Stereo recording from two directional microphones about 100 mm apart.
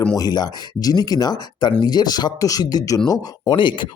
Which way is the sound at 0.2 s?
40° left (ahead or behind).